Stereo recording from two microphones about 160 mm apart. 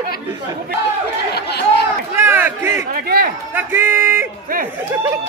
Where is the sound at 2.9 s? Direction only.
70° right (ahead or behind).